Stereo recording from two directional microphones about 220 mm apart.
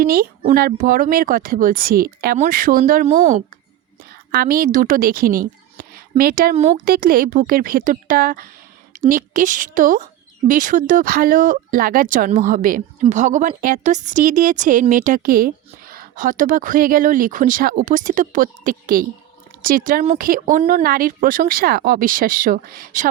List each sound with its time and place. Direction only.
0.0 s speech: 40° right (ahead or behind)
4.3 s speech: 40° right (ahead or behind)